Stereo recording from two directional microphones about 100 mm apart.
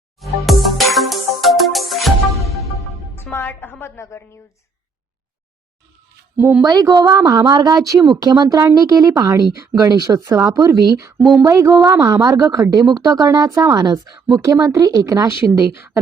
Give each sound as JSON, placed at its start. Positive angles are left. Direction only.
{"t": 0.2, "sound": "music", "side_deg": 0}
{"t": 3.3, "sound": "music", "side_deg": 20}
{"t": 6.3, "sound": "speech", "side_deg": -20}
{"t": 6.6, "sound": "speech", "side_deg": -40}